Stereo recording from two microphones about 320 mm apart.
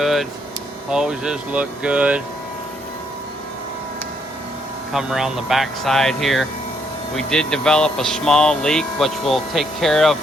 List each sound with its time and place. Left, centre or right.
0.0 s a sound: centre
0.9 s speech: centre
4.9 s speech: centre